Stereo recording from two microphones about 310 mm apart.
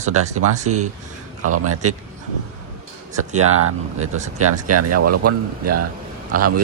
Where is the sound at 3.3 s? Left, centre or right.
Right.